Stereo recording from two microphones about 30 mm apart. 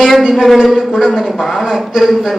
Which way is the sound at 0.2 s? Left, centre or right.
Centre.